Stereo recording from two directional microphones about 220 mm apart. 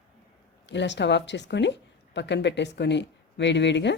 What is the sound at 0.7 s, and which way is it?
Speech, 55° left (ahead or behind).